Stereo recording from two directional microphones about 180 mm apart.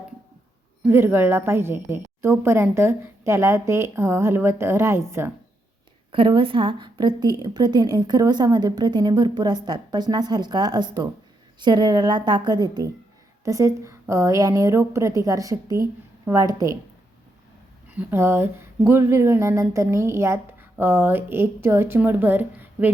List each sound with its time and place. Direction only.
0.8 s speech: 10° right (ahead or behind)
6.1 s a woman's voice: 30° right (ahead or behind)
17.9 s speech: 15° right (ahead or behind)